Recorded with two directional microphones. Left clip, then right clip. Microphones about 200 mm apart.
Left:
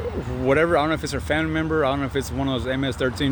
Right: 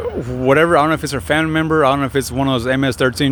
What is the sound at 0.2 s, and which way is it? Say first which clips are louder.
Speech: right 6 dB; 35° right (ahead or behind).